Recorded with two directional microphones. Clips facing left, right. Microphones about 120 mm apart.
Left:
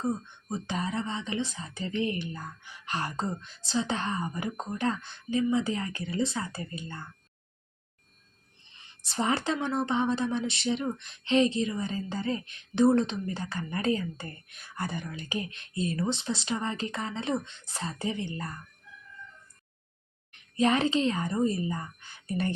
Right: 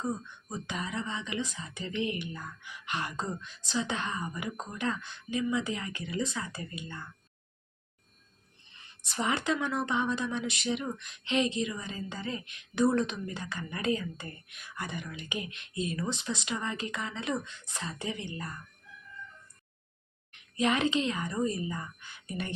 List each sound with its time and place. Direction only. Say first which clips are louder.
0.5 s a woman's voice: left 4 dB; 35° left (ahead or behind)
9.0 s a woman's voice: left 2 dB; 30° left (ahead or behind)
20.3 s speech: left 3 dB; 35° left (ahead or behind)